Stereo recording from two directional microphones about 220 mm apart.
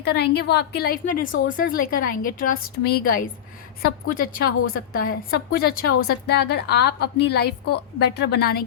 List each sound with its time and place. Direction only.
0.0 s a woman's voice: 50° left (ahead or behind)